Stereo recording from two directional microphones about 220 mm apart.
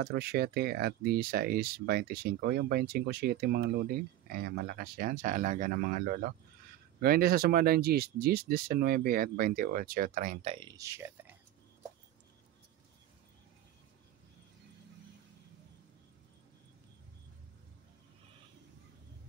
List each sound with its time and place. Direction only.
0.0 s speech: 45° right (ahead or behind); by 11.3 s 10° right (ahead or behind)